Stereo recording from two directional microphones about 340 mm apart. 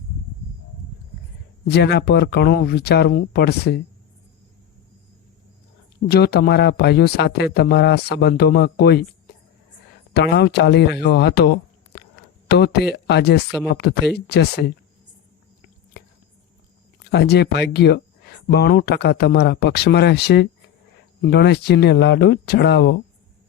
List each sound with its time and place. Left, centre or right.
1.6 s speech: left
6.1 s speech: left
10.2 s speech: left
12.5 s speech: left
17.1 s speech: left